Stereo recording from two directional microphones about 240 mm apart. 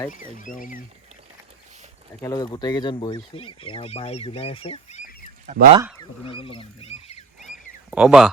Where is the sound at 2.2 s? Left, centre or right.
Centre; by 5.3 s left.